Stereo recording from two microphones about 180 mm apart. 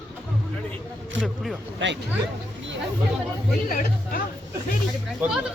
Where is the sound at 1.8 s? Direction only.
90° right.